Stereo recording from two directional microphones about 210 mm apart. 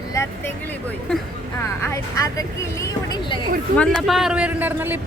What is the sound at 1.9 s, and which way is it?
Speech, 15° left (ahead or behind).